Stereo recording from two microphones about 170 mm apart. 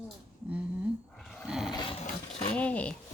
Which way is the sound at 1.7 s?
30° left (ahead or behind).